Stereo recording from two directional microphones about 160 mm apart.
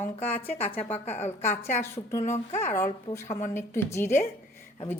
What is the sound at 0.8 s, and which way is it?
Speech, 10° left (ahead or behind).